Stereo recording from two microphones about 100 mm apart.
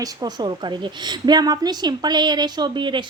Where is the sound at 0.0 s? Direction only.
45° right (ahead or behind).